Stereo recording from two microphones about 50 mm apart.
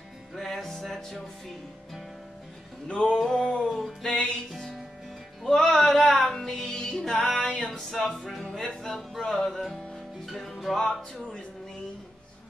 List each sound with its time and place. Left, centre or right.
0.4 s music: centre
2.9 s music: centre